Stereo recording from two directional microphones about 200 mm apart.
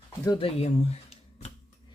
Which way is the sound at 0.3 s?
25° left (ahead or behind).